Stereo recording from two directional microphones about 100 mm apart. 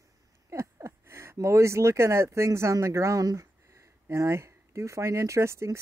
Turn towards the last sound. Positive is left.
turn(degrees=-30)  # may be behind; listen again after turning